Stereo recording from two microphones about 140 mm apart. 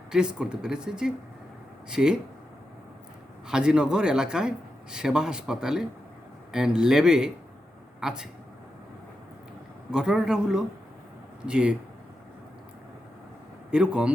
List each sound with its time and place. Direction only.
0.1 s speech: 5° right (ahead or behind)
3.4 s speech: 5° right (ahead or behind)
9.9 s speech: 5° right (ahead or behind)
13.7 s speech: 5° right (ahead or behind)